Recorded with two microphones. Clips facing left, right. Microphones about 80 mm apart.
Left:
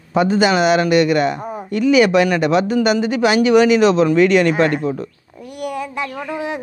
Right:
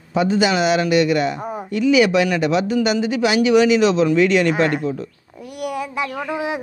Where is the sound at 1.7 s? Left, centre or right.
Left.